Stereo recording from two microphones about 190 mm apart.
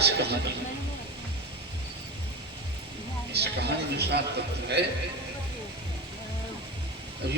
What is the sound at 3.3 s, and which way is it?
Speech, 60° right (ahead or behind).